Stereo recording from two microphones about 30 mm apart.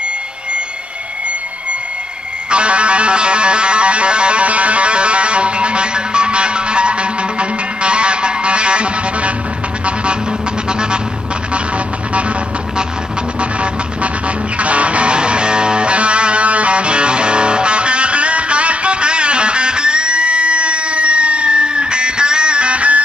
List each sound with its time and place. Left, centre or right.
2.5 s music: right
10.7 s vehicle: right
13.4 s vehicle: right
14.6 s music: right
15.1 s music: right